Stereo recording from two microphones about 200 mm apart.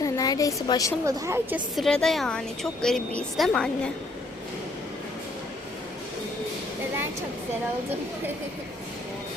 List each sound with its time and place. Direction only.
0.0 s a woman's voice: 15° left (ahead or behind)
1.0 s a woman's voice: 15° right (ahead or behind); by 3.7 s centre (ahead or behind)